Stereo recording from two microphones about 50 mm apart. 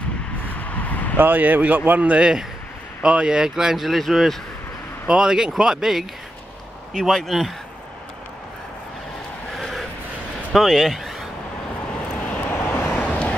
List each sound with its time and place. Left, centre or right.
0.6 s vehicle: left
1.1 s speech: right
3.0 s speech: centre
5.0 s speech: centre
7.0 s speech: centre
9.6 s a sound: centre
10.5 s speech: centre
12.4 s vehicle: left
12.8 s vehicle: left